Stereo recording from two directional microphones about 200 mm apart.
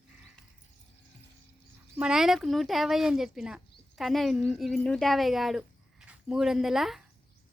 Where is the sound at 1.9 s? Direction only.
5° right (ahead or behind).